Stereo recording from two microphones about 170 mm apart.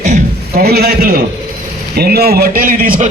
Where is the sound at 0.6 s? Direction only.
65° right (ahead or behind).